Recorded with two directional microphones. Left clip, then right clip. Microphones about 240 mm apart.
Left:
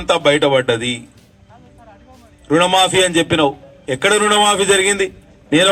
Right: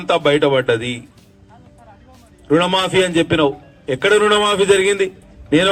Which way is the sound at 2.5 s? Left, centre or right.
Left.